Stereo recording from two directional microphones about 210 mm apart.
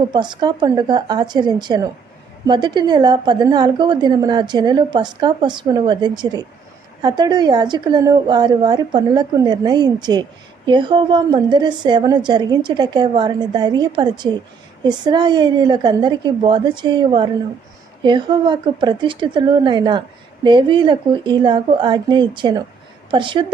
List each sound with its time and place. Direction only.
0.1 s a woman's voice: 20° right (ahead or behind)